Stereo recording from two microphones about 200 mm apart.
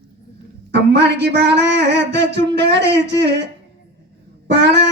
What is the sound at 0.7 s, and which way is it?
Speech, 60° right (ahead or behind).